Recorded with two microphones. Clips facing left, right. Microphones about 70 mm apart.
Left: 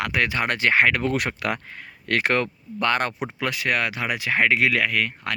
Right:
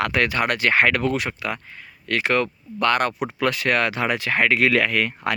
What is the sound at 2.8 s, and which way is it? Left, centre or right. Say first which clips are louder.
Speech: right 3 dB; left.